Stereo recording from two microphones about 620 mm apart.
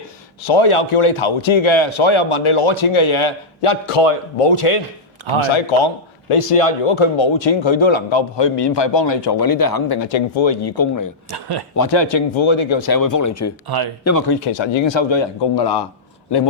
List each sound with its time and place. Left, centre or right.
0.4 s a man's voice: left
11.3 s speech: right
11.8 s a man's voice: left